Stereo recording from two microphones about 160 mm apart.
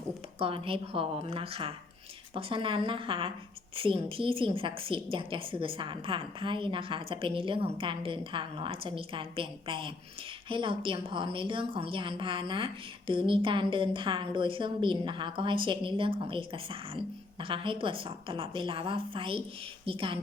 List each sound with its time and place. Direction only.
0.3 s a woman's voice: 35° right (ahead or behind)